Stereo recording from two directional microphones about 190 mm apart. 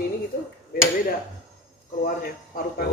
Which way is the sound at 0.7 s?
50° left (ahead or behind).